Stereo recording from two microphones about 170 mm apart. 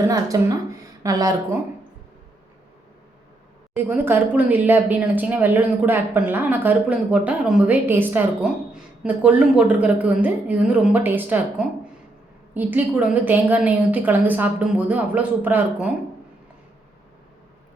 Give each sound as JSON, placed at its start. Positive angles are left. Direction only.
{"t": 0.1, "sound": "a woman's voice", "side_deg": -20}
{"t": 3.8, "sound": "a woman's voice", "side_deg": -15}